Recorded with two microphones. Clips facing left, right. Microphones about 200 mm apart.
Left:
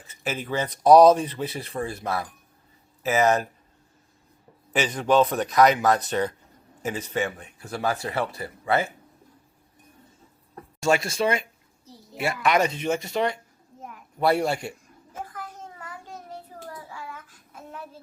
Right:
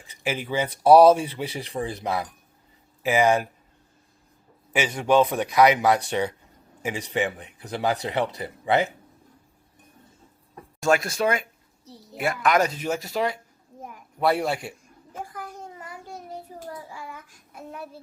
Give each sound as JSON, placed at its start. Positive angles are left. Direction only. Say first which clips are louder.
{"t": 0.1, "sound": "speech", "louder": "right 1 dB", "side_deg": -10}
{"t": 4.7, "sound": "speech", "louder": "right 1 dB", "side_deg": -10}
{"t": 10.8, "sound": "speech", "louder": "right 1 dB", "side_deg": 0}
{"t": 15.2, "sound": "child singing", "louder": "right 1 dB", "side_deg": -10}